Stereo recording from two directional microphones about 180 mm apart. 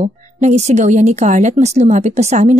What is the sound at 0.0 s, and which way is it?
Speech, 40° right (ahead or behind).